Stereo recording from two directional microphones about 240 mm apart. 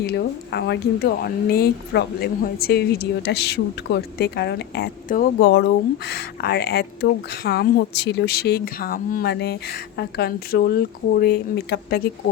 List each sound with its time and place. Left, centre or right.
0.0 s speech: left